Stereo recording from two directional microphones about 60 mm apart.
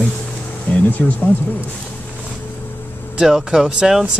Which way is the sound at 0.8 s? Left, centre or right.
Left.